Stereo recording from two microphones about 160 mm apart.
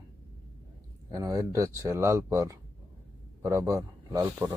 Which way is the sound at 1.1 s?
20° right (ahead or behind).